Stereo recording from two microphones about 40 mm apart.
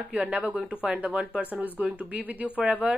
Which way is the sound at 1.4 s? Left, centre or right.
Right.